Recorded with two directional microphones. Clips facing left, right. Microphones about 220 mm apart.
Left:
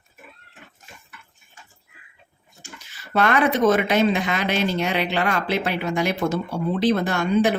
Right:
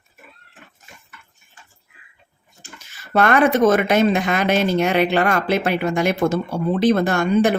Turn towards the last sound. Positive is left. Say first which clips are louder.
# right 3 dB
turn(degrees=-50)  # may be behind; listen again after turning